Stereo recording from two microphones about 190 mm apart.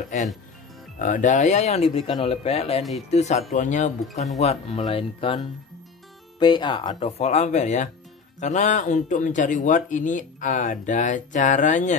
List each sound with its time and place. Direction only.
1.0 s speech: 40° left (ahead or behind)